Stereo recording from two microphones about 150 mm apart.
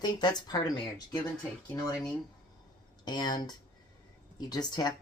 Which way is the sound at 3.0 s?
30° left (ahead or behind).